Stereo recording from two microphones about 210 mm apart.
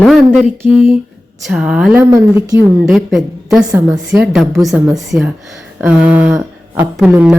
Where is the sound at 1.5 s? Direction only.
5° right (ahead or behind).